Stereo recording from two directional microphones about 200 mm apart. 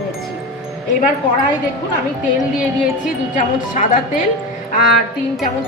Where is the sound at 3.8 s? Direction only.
40° left (ahead or behind).